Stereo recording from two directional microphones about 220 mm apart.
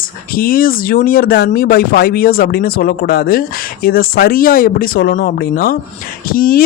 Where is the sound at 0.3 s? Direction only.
40° left (ahead or behind).